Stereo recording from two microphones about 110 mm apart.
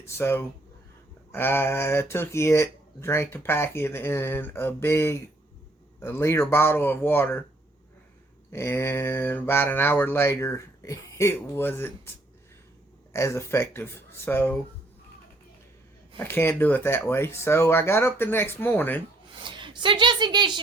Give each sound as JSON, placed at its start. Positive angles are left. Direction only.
{"t": 0.0, "sound": "speech", "side_deg": 20}
{"t": 8.5, "sound": "speech", "side_deg": 20}
{"t": 13.1, "sound": "speech", "side_deg": 25}
{"t": 16.1, "sound": "speech", "side_deg": 20}
{"t": 19.4, "sound": "a woman's voice", "side_deg": -45}